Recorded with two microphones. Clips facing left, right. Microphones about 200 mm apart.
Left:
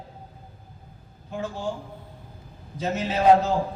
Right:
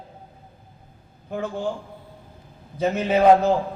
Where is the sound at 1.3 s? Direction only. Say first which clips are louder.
Right 4 dB; 60° right (ahead or behind).